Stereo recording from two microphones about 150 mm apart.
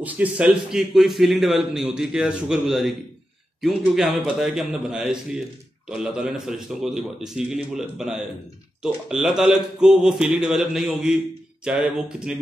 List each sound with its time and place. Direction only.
0.0 s a man's voice: 10° right (ahead or behind)
8.8 s a man's voice: 5° right (ahead or behind)